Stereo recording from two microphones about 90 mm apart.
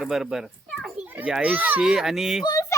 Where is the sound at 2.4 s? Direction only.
40° left (ahead or behind).